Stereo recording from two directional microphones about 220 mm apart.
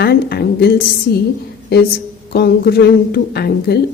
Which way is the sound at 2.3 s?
45° left (ahead or behind).